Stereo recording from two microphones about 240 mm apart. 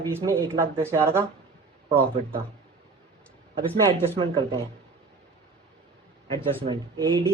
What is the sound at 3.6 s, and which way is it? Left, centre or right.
Speech, centre.